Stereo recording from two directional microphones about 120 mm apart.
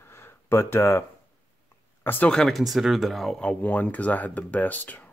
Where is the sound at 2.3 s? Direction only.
5° left (ahead or behind).